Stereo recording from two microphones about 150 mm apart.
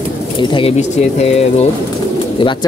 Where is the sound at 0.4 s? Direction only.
35° left (ahead or behind).